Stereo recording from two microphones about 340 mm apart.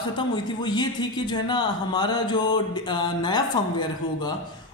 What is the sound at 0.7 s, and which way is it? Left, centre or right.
A woman's voice, centre.